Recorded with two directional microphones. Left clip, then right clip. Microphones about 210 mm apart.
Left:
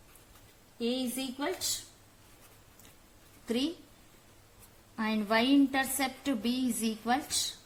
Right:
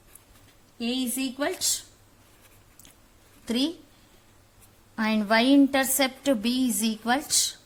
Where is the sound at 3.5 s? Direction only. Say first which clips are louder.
Right 5 dB; 35° right (ahead or behind).